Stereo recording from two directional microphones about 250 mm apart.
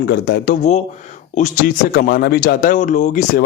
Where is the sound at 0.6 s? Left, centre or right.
Left.